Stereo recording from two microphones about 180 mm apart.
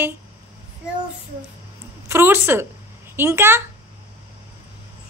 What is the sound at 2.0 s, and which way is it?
A woman's voice, 15° right (ahead or behind).